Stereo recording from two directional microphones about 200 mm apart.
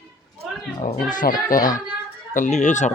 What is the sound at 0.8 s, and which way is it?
Speech, 35° left (ahead or behind).